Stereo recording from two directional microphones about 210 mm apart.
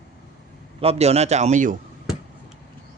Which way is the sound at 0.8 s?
30° right (ahead or behind).